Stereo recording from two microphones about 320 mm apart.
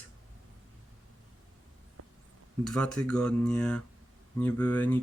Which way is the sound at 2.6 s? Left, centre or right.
Centre.